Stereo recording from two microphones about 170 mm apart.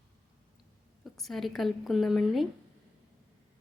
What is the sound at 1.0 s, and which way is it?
A woman's voice, centre (ahead or behind).